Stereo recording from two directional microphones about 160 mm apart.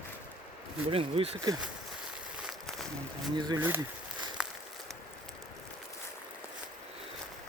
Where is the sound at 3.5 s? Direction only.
15° right (ahead or behind).